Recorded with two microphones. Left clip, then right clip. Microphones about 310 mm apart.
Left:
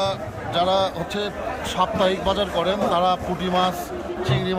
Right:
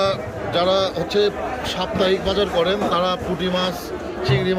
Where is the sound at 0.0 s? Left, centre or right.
Centre.